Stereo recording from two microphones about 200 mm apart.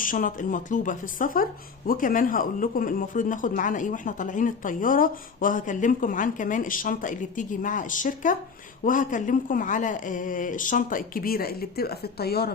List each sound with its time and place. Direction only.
0.0 s speech: 40° left (ahead or behind)